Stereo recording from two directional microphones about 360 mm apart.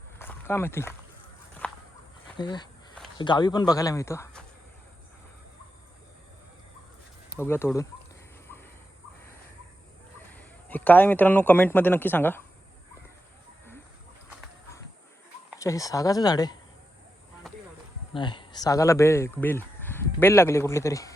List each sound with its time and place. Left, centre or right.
0.2 s a sound: centre
1.6 s walk: centre
2.4 s a sound: centre
3.2 s speech: centre
7.3 s speech: centre
10.3 s a man's voice: centre
15.5 s speech: centre
18.1 s speech: centre